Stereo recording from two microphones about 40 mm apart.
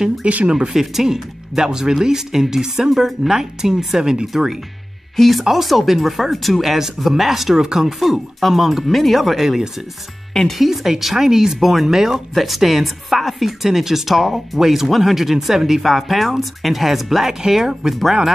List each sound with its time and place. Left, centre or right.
0.2 s speech: right
0.5 s speech: centre
5.1 s speech: centre
5.4 s a woman's voice: centre
8.0 s a woman's voice: centre